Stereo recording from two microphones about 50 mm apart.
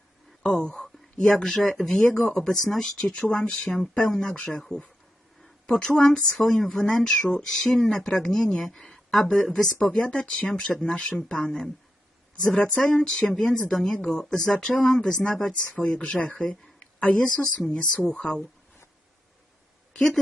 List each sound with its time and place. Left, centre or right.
0.4 s speech: centre